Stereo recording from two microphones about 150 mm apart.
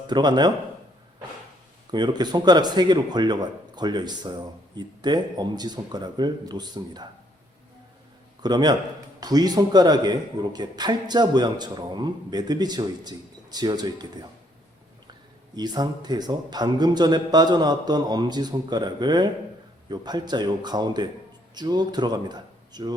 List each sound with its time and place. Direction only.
0.1 s a man's voice: 30° right (ahead or behind)
1.9 s a man's voice: 30° right (ahead or behind)
8.4 s a man's voice: 30° right (ahead or behind)
15.5 s a man's voice: 30° right (ahead or behind)